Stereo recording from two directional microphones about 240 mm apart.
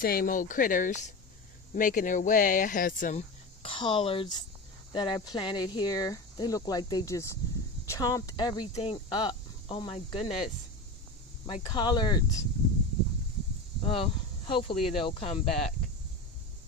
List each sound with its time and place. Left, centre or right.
0.0 s speech: left; by 12.4 s centre
13.8 s speech: left